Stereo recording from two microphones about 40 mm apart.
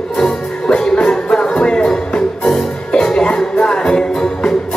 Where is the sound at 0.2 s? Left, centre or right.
Left.